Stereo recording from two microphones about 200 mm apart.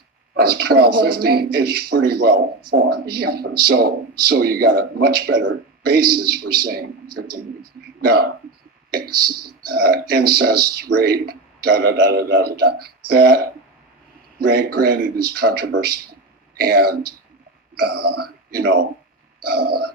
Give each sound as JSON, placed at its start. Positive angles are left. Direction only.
{"t": 0.3, "sound": "speech", "side_deg": -50}
{"t": 8.9, "sound": "speech", "side_deg": -50}